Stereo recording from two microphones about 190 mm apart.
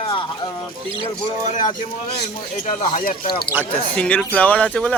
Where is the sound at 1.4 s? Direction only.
45° left (ahead or behind).